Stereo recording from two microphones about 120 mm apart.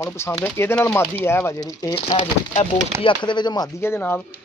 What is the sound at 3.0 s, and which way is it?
Speech, 40° left (ahead or behind).